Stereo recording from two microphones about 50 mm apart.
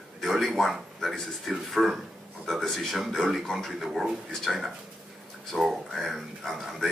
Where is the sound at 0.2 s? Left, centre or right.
Centre.